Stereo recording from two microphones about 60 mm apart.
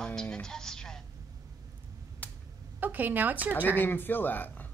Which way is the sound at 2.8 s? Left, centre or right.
Right.